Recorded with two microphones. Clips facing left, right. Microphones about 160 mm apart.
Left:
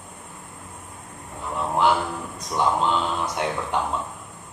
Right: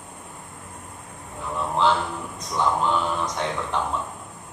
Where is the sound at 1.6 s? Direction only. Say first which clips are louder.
Left 1 dB; 15° left (ahead or behind).